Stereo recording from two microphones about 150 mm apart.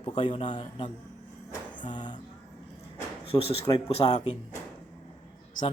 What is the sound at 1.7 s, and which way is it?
Music, 30° left (ahead or behind).